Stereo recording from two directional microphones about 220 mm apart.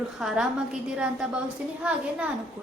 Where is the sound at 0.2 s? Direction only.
Centre (ahead or behind).